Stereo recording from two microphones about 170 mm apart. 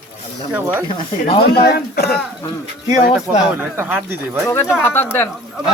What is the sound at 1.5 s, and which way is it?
Speech, 70° left (ahead or behind).